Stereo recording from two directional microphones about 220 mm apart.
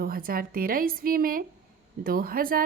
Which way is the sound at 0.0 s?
40° right (ahead or behind).